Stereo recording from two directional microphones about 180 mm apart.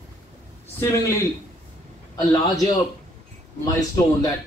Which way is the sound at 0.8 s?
15° left (ahead or behind).